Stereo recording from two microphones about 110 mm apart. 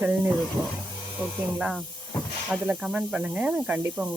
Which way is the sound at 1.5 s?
5° right (ahead or behind).